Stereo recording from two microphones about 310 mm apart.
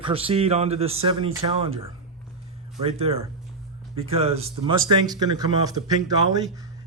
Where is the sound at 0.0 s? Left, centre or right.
Centre.